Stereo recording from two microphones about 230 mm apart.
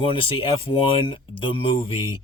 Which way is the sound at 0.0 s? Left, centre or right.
Left.